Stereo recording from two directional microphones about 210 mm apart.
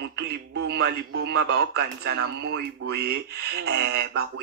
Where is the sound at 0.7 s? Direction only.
50° right (ahead or behind).